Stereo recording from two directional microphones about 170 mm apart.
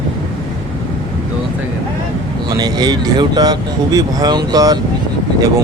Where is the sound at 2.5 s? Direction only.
25° right (ahead or behind).